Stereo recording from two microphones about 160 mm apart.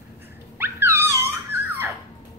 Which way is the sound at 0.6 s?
15° right (ahead or behind).